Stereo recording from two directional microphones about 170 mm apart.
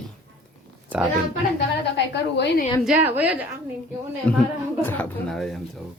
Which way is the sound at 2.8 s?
10° right (ahead or behind).